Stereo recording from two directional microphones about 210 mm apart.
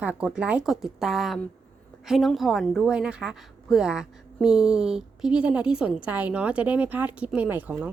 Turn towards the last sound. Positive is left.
turn(degrees=-10)  # may be behind; listen again after turning